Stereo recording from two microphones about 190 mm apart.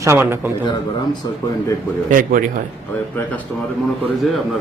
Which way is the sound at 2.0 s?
45° right (ahead or behind).